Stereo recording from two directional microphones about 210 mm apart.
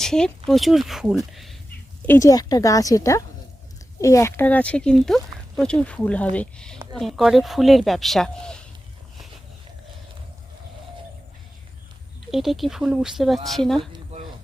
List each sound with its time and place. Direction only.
0.0 s a woman's voice: 5° left (ahead or behind)
2.0 s speech: 15° left (ahead or behind)
12.3 s speech: centre (ahead or behind)
13.7 s a sound: 25° right (ahead or behind)